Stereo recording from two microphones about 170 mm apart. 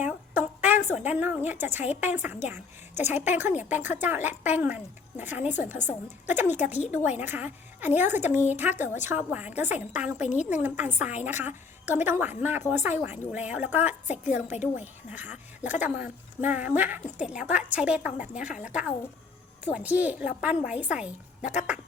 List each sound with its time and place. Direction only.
0.0 s a sound: 10° right (ahead or behind)
0.9 s a woman's voice: 10° right (ahead or behind)
10.2 s a woman's voice: 45° left (ahead or behind)
10.5 s a woman's voice: 10° right (ahead or behind)
14.4 s a woman's voice: 45° left (ahead or behind)
14.8 s a woman's voice: 10° right (ahead or behind)